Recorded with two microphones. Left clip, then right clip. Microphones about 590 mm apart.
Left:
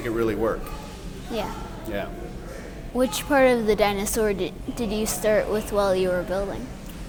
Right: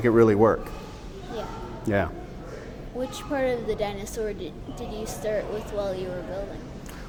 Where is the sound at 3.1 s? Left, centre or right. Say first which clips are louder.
Left 7 dB; left.